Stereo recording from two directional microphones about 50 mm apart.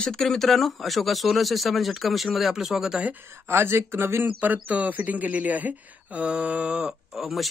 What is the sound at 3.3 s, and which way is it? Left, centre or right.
Speech, right.